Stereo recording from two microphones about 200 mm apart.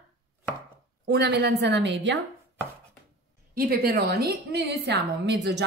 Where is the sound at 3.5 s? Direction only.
45° right (ahead or behind).